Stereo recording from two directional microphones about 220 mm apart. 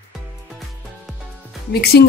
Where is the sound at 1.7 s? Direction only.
45° left (ahead or behind).